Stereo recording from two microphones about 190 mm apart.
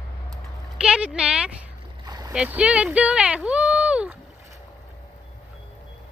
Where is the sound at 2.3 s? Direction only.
5° right (ahead or behind).